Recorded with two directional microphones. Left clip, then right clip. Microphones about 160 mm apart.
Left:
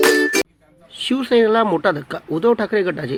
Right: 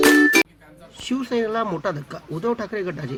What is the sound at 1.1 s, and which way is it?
Speech, 20° left (ahead or behind).